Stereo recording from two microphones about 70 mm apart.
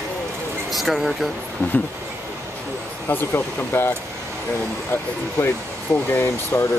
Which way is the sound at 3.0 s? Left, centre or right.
Left.